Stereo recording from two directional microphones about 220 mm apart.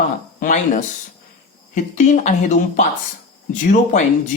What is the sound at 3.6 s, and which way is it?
Speech, 35° left (ahead or behind).